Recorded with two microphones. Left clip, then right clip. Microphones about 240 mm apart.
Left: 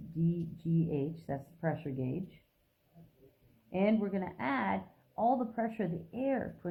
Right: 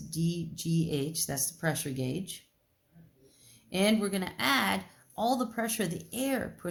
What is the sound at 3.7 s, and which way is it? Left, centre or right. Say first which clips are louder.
Speech: right 3 dB; right.